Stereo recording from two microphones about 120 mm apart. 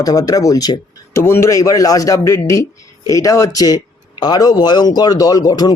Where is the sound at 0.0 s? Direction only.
30° left (ahead or behind).